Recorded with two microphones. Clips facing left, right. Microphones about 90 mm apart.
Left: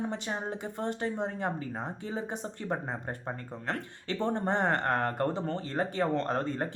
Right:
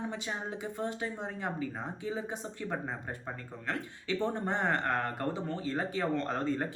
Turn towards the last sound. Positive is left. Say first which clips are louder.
# left 1 dB
turn(degrees=45)  # may be behind; listen again after turning